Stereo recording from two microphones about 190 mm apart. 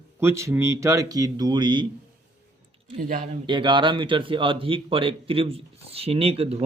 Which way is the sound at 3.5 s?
25° right (ahead or behind).